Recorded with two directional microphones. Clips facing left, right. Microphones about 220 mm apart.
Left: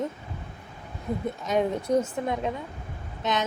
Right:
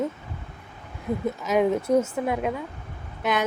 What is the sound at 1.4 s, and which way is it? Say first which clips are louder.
Speech: right 4 dB; 5° right (ahead or behind).